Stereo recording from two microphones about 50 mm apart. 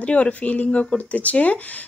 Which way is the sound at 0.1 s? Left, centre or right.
Left.